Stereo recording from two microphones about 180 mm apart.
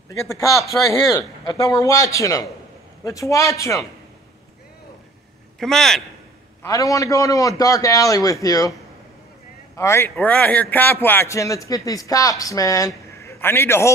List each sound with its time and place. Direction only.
0.1 s a man's voice: 15° left (ahead or behind)
5.6 s a man's voice: centre (ahead or behind)
6.6 s a man's voice: 20° left (ahead or behind)
9.8 s a man's voice: 15° left (ahead or behind)